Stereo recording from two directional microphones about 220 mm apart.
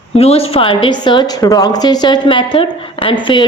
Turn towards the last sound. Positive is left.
turn(degrees=20)  # may be behind; listen again after turning